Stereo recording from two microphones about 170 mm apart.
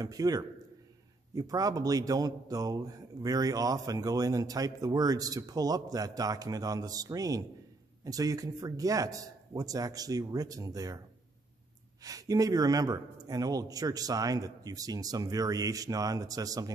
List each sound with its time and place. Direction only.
0.0 s a man's voice: 20° right (ahead or behind)
12.0 s a man's voice: 20° right (ahead or behind)